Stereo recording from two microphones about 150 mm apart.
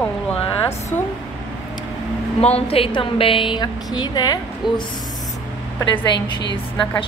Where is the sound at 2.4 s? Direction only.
40° left (ahead or behind).